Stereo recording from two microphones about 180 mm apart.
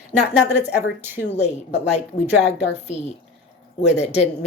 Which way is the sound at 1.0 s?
10° right (ahead or behind).